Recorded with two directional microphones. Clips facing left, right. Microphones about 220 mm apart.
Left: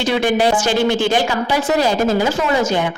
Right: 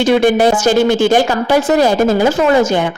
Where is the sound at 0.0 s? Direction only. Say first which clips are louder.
Right 6 dB; 50° right (ahead or behind).